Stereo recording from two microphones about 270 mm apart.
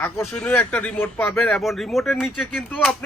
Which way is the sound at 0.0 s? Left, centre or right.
Centre.